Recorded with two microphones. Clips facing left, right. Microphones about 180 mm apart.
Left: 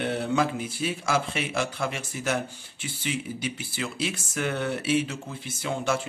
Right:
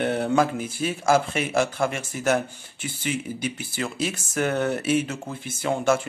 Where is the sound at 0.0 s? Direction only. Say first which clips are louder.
Right 4 dB; 50° right (ahead or behind).